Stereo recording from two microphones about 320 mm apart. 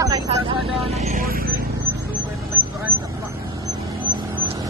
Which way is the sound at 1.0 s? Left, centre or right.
Right.